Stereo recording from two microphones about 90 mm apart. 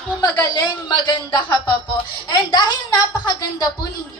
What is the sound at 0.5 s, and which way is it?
A woman's voice, 50° left (ahead or behind).